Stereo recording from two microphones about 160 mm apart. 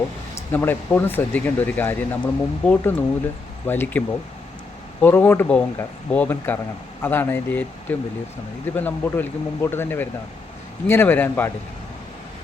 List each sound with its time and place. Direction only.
0.3 s speech: 15° left (ahead or behind)